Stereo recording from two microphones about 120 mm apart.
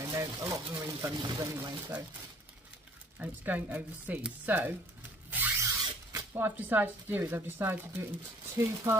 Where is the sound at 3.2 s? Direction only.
15° right (ahead or behind).